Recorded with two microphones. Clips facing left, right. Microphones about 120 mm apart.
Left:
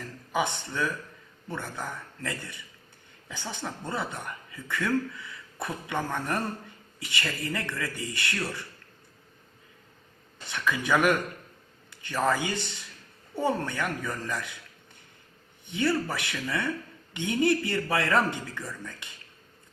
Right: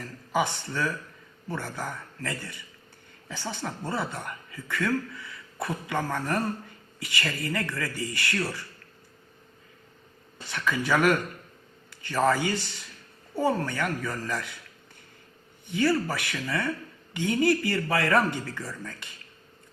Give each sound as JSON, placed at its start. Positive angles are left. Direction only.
{"t": 0.4, "sound": "speech", "side_deg": 20}
{"t": 10.4, "sound": "speech", "side_deg": 15}
{"t": 12.2, "sound": "speech", "side_deg": 15}
{"t": 15.6, "sound": "speech", "side_deg": 25}